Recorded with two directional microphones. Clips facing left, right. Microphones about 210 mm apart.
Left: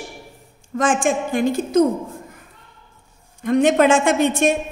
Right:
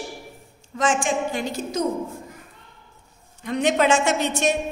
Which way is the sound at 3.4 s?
50° left (ahead or behind).